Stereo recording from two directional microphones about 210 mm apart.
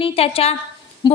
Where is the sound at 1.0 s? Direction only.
20° left (ahead or behind).